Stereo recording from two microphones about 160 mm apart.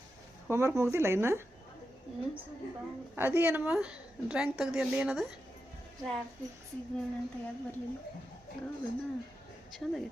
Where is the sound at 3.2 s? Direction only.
15° right (ahead or behind).